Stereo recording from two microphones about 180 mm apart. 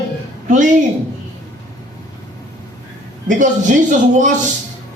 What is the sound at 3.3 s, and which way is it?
A man's voice, 45° right (ahead or behind).